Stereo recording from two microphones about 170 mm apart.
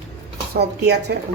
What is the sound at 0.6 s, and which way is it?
Speech, 75° right (ahead or behind).